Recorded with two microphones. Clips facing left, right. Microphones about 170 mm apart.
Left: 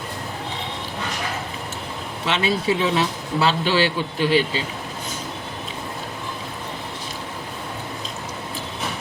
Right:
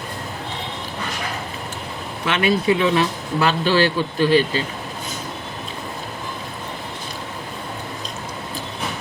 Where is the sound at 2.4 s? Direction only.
60° right (ahead or behind).